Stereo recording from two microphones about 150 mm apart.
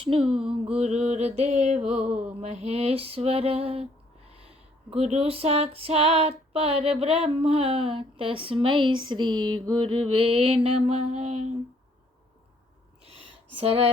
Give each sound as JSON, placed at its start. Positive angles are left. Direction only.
{"t": 0.0, "sound": "female singing", "side_deg": -40}
{"t": 0.8, "sound": "mantra", "side_deg": -45}
{"t": 4.3, "sound": "female singing", "side_deg": -40}
{"t": 13.1, "sound": "a sound", "side_deg": -40}